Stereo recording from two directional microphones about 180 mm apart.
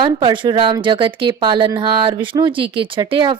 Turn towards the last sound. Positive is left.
turn(degrees=-30)  # may be behind; listen again after turning